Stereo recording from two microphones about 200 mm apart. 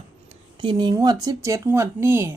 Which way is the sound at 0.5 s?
25° right (ahead or behind).